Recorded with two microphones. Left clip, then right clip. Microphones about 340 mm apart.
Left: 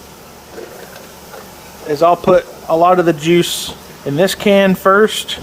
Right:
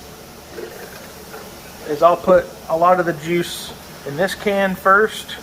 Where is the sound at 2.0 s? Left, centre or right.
Left.